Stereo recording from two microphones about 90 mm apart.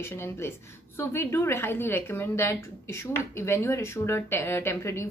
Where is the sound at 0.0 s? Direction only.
25° left (ahead or behind).